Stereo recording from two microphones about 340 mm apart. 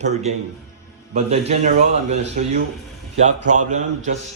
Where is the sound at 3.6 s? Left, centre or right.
Right.